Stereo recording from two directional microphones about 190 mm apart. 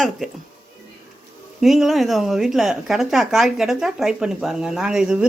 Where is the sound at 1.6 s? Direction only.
Centre (ahead or behind).